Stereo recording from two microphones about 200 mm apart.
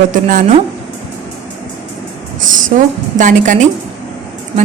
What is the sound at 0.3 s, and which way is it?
Speech, 40° right (ahead or behind).